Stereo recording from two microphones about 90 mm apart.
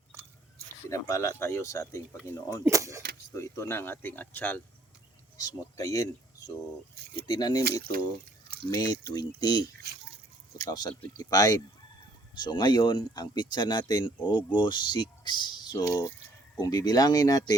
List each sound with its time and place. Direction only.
0.9 s speech: 40° left (ahead or behind)
2.6 s speech: 35° right (ahead or behind)
3.3 s speech: 35° left (ahead or behind)
5.4 s speech: 40° left (ahead or behind)
7.3 s speech: 50° left (ahead or behind)
8.7 s speech: 50° left (ahead or behind)
10.7 s speech: 50° left (ahead or behind)
15.8 s speech: 35° left (ahead or behind)